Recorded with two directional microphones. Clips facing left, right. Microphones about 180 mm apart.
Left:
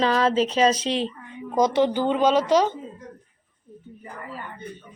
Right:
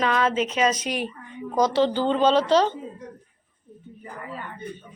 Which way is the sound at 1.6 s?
15° left (ahead or behind).